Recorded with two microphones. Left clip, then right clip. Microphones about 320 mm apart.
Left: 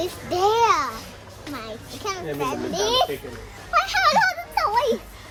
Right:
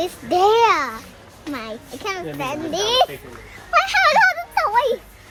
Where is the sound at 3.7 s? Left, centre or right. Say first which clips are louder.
Right 4 dB; centre.